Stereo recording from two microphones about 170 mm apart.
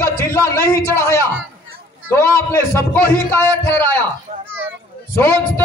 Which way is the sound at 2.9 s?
10° left (ahead or behind).